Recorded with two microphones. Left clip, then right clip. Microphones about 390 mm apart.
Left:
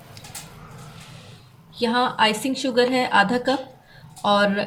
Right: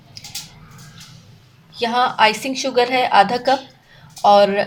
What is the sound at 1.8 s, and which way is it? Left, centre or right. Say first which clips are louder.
A woman's voice: right 4 dB; centre.